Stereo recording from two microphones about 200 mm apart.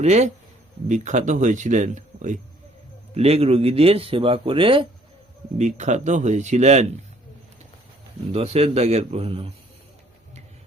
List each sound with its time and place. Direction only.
0.0 s speech: 35° right (ahead or behind)
8.3 s speech: 30° right (ahead or behind)